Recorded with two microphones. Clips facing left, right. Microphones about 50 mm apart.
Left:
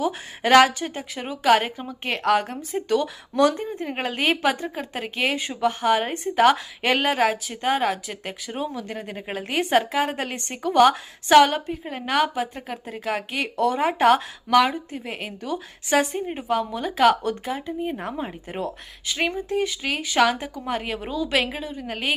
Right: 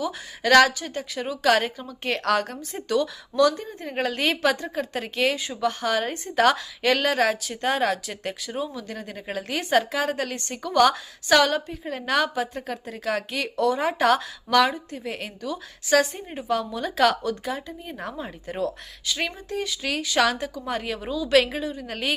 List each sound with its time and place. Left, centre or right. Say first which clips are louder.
0.0 s a woman's voice: left 3 dB; left
3.3 s a woman's voice: left 1 dB; left; by 8.4 s centre
8.4 s a woman's voice: left 4 dB; left; by 22.1 s centre